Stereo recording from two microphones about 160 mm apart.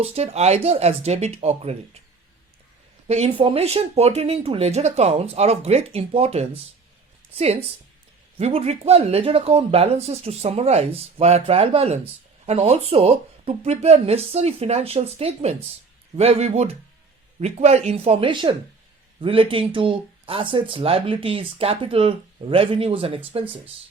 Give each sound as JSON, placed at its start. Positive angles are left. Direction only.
{"t": 0.0, "sound": "speech", "side_deg": -40}
{"t": 3.1, "sound": "speech", "side_deg": -40}